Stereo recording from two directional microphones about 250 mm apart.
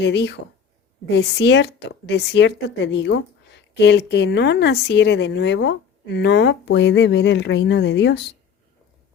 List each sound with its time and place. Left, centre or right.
0.0 s speech: left